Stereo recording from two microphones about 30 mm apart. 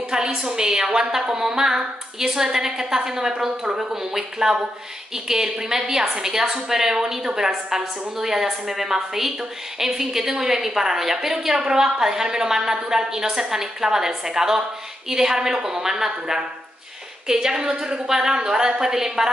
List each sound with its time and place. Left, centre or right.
0.1 s a woman's voice: right